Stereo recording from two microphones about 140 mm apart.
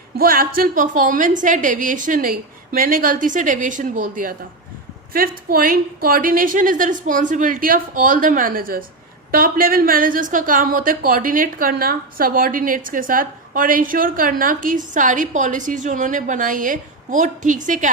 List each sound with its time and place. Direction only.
0.2 s a woman's voice: 90° right; by 4.4 s 75° right (ahead or behind)
5.1 s a woman's voice: 90° right; by 17.9 s 65° right (ahead or behind)